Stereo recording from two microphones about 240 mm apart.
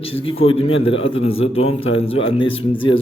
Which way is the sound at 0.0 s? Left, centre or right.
Left.